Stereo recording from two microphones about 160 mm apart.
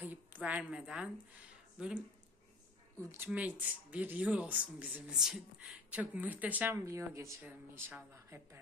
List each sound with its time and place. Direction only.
0.0 s a woman's voice: 10° right (ahead or behind)
3.0 s speech: 20° right (ahead or behind)